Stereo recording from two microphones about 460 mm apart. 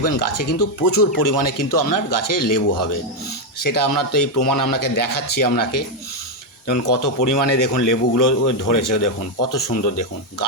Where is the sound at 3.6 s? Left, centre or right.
Left.